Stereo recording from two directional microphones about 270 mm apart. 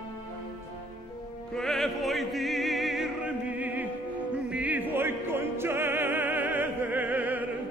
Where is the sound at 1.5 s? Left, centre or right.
Centre.